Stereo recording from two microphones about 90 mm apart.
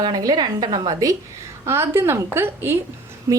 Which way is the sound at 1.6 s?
30° right (ahead or behind).